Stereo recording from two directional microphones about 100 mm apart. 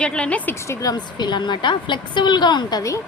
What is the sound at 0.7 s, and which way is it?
A woman's voice, 35° left (ahead or behind).